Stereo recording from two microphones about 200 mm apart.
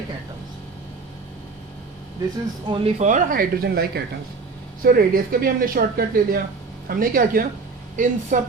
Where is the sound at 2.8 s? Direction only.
35° right (ahead or behind).